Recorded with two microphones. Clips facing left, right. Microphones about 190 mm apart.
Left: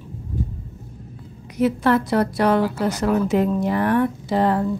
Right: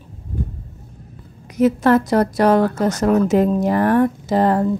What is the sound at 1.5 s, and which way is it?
Speech, 45° right (ahead or behind).